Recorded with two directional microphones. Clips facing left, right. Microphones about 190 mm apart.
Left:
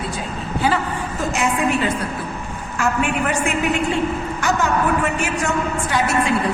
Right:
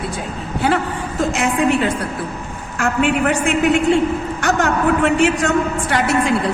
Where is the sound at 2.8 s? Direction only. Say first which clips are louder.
Right 3 dB; 70° right (ahead or behind).